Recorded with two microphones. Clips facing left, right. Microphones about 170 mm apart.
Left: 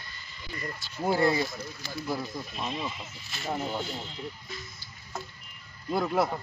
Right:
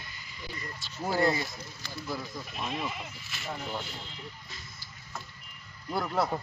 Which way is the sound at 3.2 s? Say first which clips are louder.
Left 6 dB; 35° left (ahead or behind).